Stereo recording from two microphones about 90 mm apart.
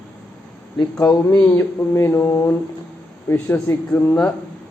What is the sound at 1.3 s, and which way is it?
A man's voice, 30° left (ahead or behind).